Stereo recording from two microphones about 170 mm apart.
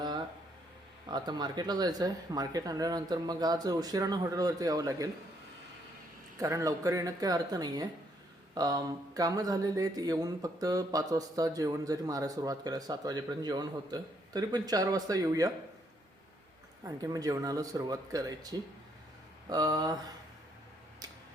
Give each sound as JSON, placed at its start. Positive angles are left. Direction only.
{"t": 1.0, "sound": "speech", "side_deg": -25}
{"t": 6.4, "sound": "speech", "side_deg": -20}
{"t": 16.8, "sound": "speech", "side_deg": -20}
{"t": 19.5, "sound": "speech", "side_deg": -20}